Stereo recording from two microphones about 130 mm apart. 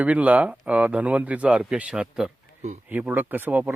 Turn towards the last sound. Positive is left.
turn(degrees=-15)  # may be behind; listen again after turning